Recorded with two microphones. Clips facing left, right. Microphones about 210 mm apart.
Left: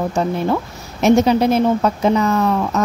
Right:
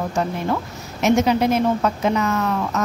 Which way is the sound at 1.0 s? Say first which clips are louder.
Left 4 dB; 35° left (ahead or behind).